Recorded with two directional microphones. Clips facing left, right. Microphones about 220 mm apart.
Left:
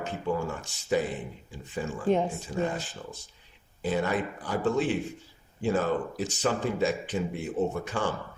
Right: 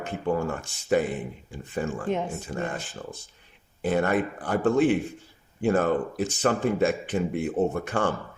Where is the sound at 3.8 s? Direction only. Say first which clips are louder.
Right 4 dB; 55° right (ahead or behind).